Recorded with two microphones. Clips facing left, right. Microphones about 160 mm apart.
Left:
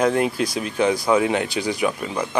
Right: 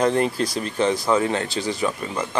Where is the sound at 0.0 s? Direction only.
5° left (ahead or behind).